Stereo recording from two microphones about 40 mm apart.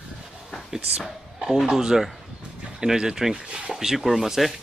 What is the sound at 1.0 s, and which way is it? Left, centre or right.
Speech, centre.